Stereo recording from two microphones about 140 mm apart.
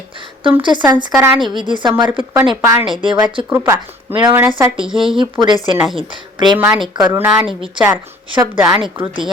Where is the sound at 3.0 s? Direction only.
35° right (ahead or behind).